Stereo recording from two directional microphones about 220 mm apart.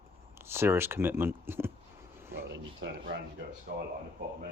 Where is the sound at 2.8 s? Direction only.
50° right (ahead or behind).